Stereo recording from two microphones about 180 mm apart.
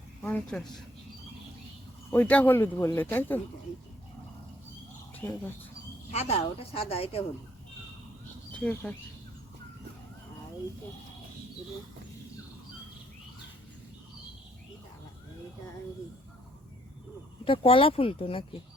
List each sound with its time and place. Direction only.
0.2 s speech: 5° left (ahead or behind)
2.0 s speech: 10° left (ahead or behind)
5.2 s speech: 10° left (ahead or behind)
6.1 s speech: 35° left (ahead or behind)
8.5 s speech: 5° left (ahead or behind)
17.4 s speech: 30° left (ahead or behind)